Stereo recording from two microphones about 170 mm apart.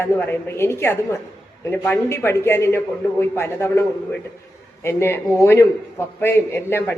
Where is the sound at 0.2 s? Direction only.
15° left (ahead or behind).